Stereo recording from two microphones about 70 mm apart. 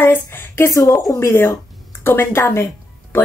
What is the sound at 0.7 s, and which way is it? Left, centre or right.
Speech, left.